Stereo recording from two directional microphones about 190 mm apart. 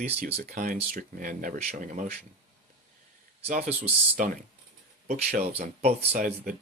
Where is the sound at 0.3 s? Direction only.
40° right (ahead or behind).